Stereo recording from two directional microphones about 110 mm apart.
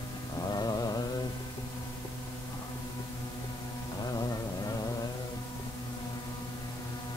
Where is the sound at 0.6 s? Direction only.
35° left (ahead or behind).